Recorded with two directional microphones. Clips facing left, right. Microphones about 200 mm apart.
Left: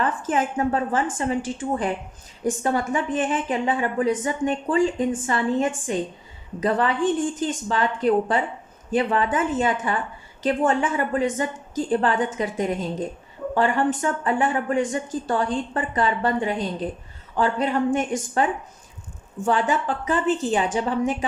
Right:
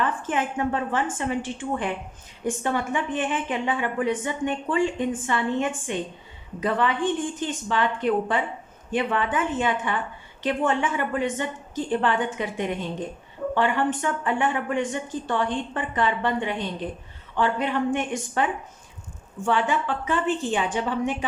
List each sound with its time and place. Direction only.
0.0 s a woman's voice: 40° left (ahead or behind)
19.5 s a woman's voice: 40° left (ahead or behind)